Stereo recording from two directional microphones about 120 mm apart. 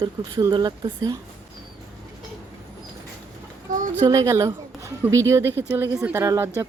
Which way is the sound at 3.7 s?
90° right.